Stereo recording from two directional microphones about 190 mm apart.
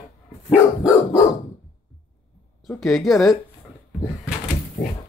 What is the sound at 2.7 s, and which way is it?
Speech, centre (ahead or behind).